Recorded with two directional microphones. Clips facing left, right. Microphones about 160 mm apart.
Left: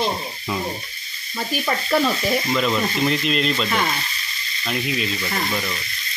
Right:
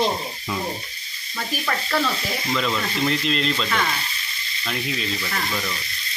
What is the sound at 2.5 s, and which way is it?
Speech, 15° left (ahead or behind).